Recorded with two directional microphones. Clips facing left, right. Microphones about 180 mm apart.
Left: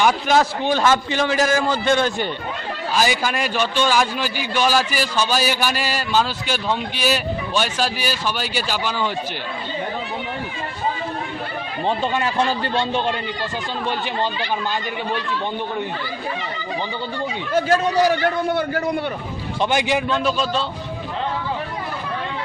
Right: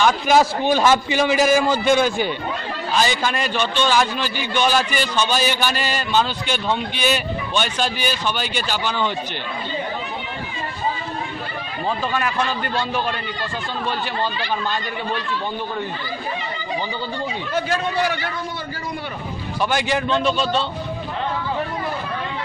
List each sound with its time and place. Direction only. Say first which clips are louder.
0.3 s a man's voice: right 2 dB; 10° right (ahead or behind)
2.9 s a man's voice: even; 5° left (ahead or behind)
12.0 s a man's voice: left 1 dB; 25° left (ahead or behind)
17.5 s a man's voice: left 6 dB; 45° left (ahead or behind)
19.6 s a man's voice: left 1 dB; 15° left (ahead or behind)
20.2 s a man's voice: right 1 dB; centre (ahead or behind)